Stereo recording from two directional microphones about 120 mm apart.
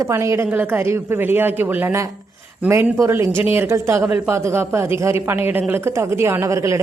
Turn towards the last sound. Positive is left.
turn(degrees=-25)  # may be behind; listen again after turning